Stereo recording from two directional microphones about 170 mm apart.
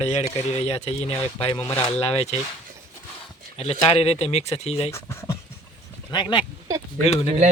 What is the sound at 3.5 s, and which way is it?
Speech, 40° left (ahead or behind).